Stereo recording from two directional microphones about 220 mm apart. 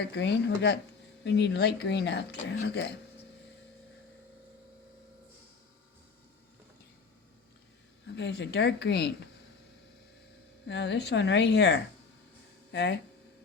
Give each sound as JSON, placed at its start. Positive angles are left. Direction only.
{"t": 0.0, "sound": "speech", "side_deg": 50}
{"t": 8.0, "sound": "speech", "side_deg": 50}
{"t": 10.7, "sound": "speech", "side_deg": 50}